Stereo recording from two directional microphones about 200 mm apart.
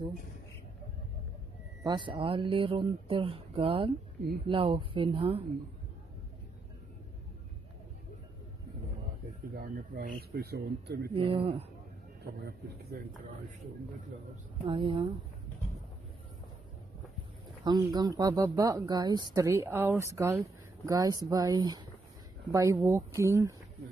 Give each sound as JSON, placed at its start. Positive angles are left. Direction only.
{"t": 1.9, "sound": "speech", "side_deg": -25}
{"t": 9.6, "sound": "speech", "side_deg": -45}
{"t": 11.1, "sound": "speech", "side_deg": -25}
{"t": 14.6, "sound": "speech", "side_deg": -25}
{"t": 17.6, "sound": "speech", "side_deg": -20}